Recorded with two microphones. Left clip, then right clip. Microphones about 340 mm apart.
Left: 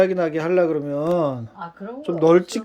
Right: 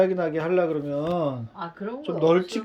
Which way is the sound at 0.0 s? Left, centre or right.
Centre.